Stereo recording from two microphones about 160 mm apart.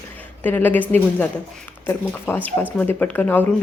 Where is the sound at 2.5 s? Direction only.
10° left (ahead or behind).